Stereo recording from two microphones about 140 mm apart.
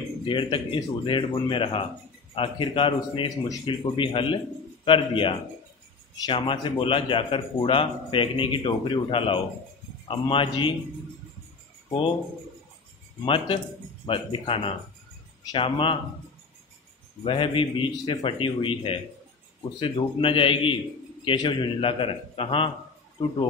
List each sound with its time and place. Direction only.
0.3 s a man's voice: 35° left (ahead or behind)
3.4 s speech: 25° left (ahead or behind)
3.9 s a man's voice: 35° left (ahead or behind)
13.2 s a man's voice: 40° left (ahead or behind)
17.2 s a man's voice: 40° left (ahead or behind)